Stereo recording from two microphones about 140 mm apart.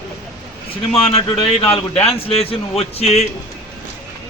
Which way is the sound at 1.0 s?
45° left (ahead or behind).